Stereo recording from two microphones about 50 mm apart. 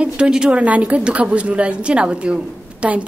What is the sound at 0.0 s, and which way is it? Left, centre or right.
A woman's voice, centre.